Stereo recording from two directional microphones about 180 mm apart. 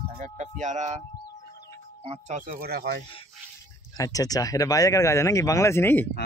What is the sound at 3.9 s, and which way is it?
Speech, 20° left (ahead or behind).